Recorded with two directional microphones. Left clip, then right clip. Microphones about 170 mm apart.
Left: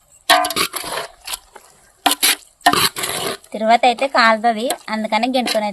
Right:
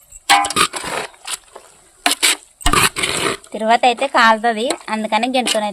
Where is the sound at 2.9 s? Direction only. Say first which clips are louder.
Right 4 dB; 20° right (ahead or behind).